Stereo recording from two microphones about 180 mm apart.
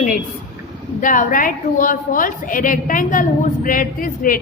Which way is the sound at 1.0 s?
50° left (ahead or behind).